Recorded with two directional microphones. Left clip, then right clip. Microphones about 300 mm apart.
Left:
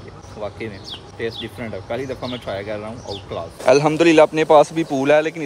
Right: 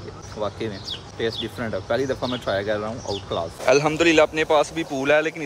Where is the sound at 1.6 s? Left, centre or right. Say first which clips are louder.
Right 3 dB; right.